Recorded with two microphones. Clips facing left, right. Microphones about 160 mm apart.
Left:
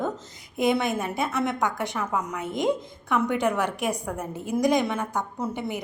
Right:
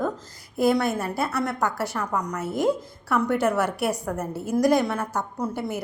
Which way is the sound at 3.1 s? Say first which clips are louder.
Right 2 dB; 5° right (ahead or behind).